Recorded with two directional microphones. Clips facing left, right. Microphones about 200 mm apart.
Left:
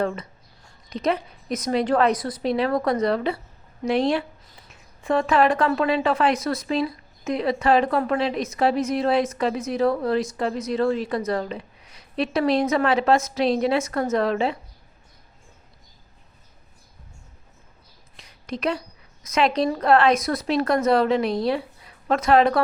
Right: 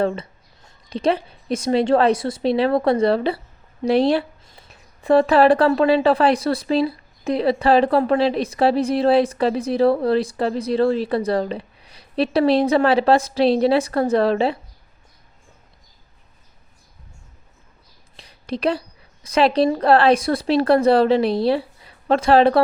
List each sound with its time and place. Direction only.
0.0 s a woman's voice: 30° right (ahead or behind)
18.2 s a woman's voice: 30° right (ahead or behind)